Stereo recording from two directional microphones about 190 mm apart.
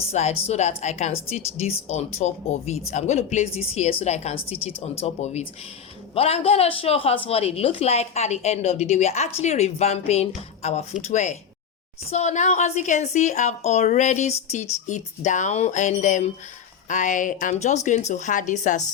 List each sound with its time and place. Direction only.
0.1 s a woman's voice: 35° left (ahead or behind)